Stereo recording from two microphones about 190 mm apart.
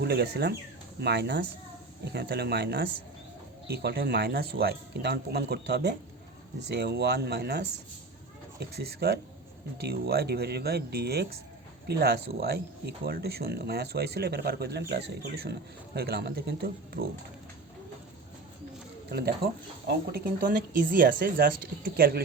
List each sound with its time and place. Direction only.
0.0 s speech: 60° right (ahead or behind)
19.0 s speech: 55° right (ahead or behind)